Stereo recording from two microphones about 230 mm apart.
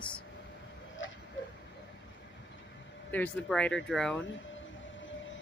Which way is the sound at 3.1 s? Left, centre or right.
Centre.